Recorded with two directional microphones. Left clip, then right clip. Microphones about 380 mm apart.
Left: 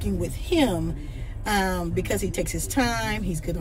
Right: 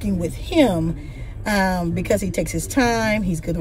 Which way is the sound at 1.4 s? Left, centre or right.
Centre.